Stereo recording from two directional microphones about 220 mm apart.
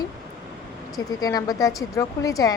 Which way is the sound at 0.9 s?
15° left (ahead or behind).